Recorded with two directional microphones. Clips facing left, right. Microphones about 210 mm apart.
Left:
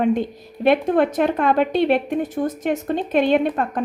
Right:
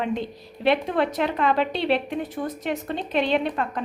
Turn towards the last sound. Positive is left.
turn(degrees=50)  # may be behind; listen again after turning